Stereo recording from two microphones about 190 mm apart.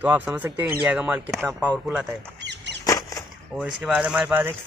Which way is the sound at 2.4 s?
65° right (ahead or behind).